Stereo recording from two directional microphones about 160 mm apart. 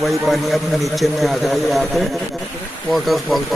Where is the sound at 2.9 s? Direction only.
Centre (ahead or behind).